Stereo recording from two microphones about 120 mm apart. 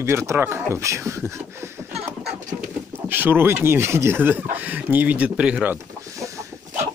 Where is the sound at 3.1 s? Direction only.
15° right (ahead or behind).